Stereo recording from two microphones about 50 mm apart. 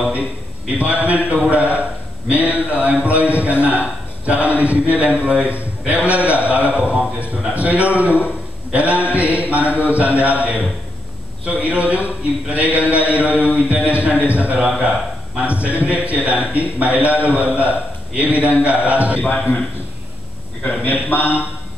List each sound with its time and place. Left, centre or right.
0.7 s a man's voice: right
20.6 s a man's voice: left